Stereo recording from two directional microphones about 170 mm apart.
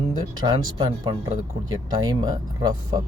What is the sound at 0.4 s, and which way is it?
Speech, 25° right (ahead or behind).